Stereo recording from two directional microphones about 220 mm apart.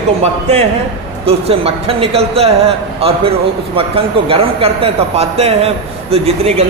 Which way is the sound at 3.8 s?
25° right (ahead or behind).